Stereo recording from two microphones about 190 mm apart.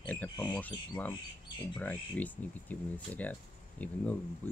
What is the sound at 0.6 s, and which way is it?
Speech, 10° left (ahead or behind).